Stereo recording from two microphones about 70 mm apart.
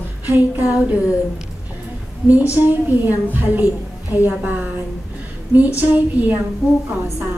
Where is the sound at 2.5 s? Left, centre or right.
Right.